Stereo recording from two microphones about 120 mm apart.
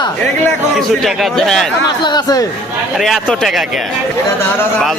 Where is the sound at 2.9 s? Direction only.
Centre (ahead or behind).